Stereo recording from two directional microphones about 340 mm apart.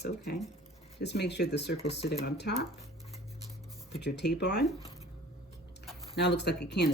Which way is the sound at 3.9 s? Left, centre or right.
Left.